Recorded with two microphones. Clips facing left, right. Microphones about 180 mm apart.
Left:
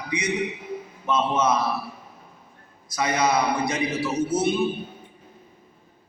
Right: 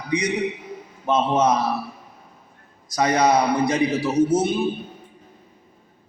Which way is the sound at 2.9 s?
40° right (ahead or behind).